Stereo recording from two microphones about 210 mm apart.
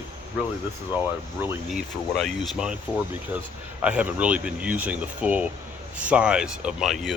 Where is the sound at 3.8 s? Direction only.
5° right (ahead or behind).